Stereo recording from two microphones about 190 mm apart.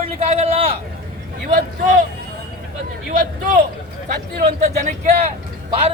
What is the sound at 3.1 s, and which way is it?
Speech, 45° right (ahead or behind).